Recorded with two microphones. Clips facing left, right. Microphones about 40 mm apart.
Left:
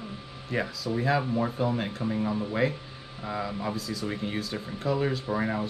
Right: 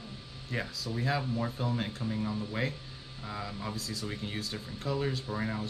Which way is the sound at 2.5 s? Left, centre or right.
Centre.